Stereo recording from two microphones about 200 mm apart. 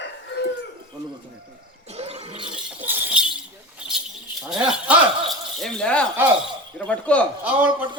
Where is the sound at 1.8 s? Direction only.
30° right (ahead or behind).